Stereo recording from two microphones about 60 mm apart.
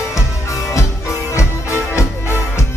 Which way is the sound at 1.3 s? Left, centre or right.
Left.